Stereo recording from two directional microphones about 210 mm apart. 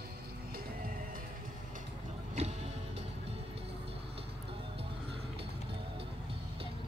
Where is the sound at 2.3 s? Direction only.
30° right (ahead or behind).